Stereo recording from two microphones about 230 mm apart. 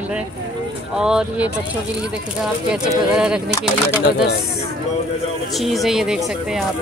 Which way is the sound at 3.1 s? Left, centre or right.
Centre.